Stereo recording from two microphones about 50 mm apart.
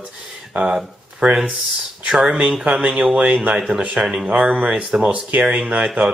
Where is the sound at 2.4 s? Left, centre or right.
Right.